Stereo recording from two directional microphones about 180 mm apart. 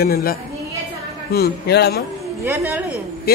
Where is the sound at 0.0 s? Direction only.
55° left (ahead or behind).